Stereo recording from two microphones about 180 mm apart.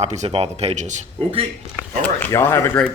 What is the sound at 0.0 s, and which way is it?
Speech, 35° right (ahead or behind).